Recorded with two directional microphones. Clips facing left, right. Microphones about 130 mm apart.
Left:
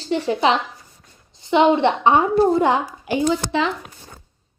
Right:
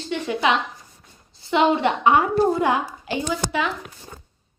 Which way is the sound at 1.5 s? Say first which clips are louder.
Left 3 dB; 20° left (ahead or behind).